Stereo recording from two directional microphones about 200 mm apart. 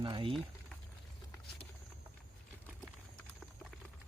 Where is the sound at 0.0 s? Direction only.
25° right (ahead or behind).